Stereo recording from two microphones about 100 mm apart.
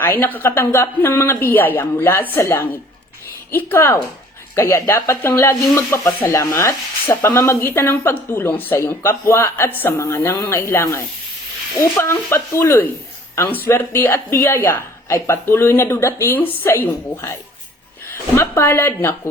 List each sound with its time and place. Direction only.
0.0 s a woman's voice: 20° left (ahead or behind)